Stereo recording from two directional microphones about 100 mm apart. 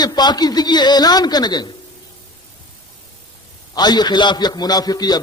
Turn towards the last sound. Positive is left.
turn(degrees=40)  # may be behind; listen again after turning